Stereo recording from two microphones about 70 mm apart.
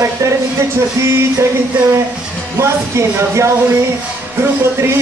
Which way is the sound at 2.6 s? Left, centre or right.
Right.